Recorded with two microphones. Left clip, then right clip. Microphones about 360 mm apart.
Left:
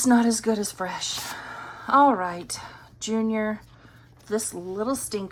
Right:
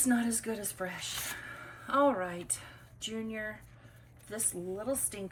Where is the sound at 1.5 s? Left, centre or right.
Centre.